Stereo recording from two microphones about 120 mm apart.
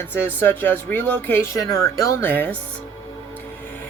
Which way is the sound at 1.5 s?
25° left (ahead or behind).